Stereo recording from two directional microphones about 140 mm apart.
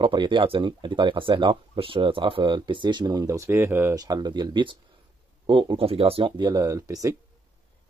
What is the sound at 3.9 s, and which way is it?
Speech, 30° right (ahead or behind).